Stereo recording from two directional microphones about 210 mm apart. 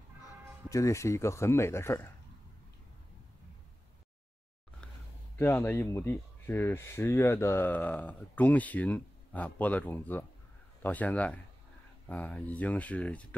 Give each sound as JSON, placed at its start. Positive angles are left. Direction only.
{"t": 0.7, "sound": "speech", "side_deg": 15}
{"t": 5.4, "sound": "speech", "side_deg": 10}